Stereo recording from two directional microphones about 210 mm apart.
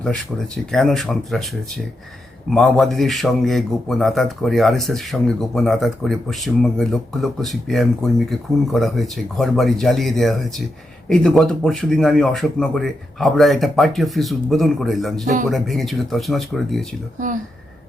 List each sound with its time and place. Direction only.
0.0 s a man's voice: 5° left (ahead or behind)
2.5 s a man's voice: centre (ahead or behind)
15.2 s speech: 40° right (ahead or behind)
15.4 s a man's voice: centre (ahead or behind)